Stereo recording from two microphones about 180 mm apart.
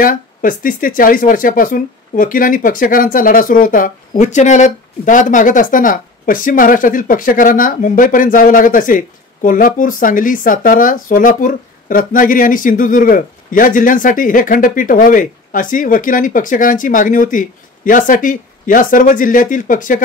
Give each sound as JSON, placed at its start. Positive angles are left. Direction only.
{"t": 0.0, "sound": "speech", "side_deg": 50}